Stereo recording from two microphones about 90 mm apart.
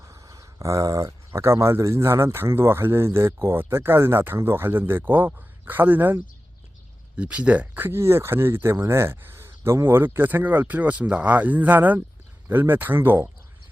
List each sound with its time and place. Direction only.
0.0 s speech: 35° right (ahead or behind)
7.2 s speech: 15° right (ahead or behind)